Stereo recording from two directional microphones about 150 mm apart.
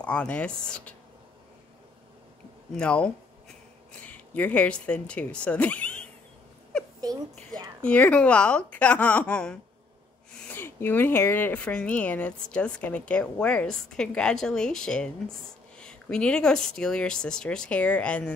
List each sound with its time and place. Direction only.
0.0 s speech: 10° left (ahead or behind)
2.7 s speech: 5° left (ahead or behind)
7.0 s speech: 25° right (ahead or behind)
7.8 s speech: 10° left (ahead or behind)